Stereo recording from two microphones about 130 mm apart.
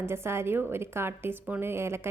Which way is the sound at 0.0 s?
20° right (ahead or behind).